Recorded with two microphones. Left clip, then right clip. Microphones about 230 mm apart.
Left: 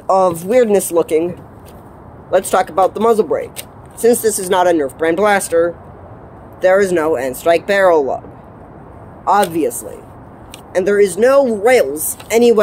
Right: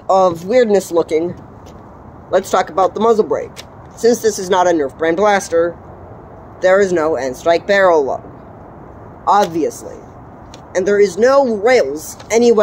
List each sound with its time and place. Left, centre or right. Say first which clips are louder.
0.0 s speech: right 1 dB; left
0.5 s speech: even; centre
2.3 s speech: left 1 dB; centre
9.2 s speech: even; centre
10.7 s speech: even; centre